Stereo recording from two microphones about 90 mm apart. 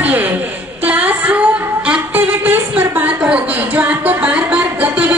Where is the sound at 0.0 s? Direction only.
20° right (ahead or behind).